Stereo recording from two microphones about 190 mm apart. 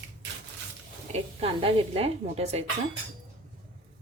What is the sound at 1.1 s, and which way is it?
Speech, 30° right (ahead or behind).